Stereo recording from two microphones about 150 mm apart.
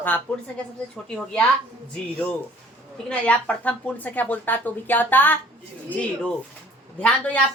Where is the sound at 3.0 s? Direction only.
10° left (ahead or behind).